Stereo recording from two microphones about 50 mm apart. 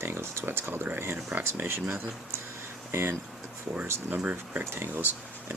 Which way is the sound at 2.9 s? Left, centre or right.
Right.